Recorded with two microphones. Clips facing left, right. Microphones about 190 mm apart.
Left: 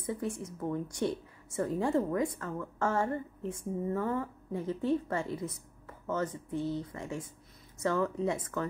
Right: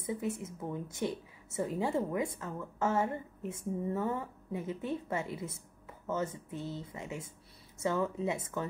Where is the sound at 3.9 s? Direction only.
10° right (ahead or behind).